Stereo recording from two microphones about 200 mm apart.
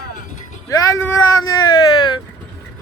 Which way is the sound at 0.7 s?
20° left (ahead or behind).